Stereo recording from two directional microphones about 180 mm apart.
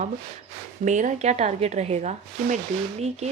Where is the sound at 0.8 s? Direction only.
45° right (ahead or behind).